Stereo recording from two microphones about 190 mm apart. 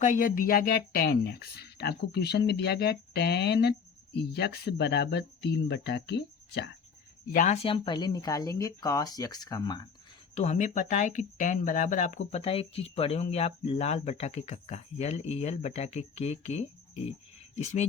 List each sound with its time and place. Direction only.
0.0 s speech: 45° left (ahead or behind); by 6.7 s 65° left (ahead or behind)
7.3 s speech: 35° left (ahead or behind); by 9.9 s 20° left (ahead or behind)
10.3 s speech: 35° left (ahead or behind)